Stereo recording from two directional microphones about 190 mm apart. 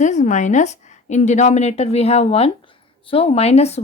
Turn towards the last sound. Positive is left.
turn(degrees=35)  # may be behind; listen again after turning